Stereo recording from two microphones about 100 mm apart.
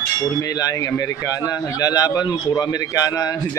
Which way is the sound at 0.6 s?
35° left (ahead or behind).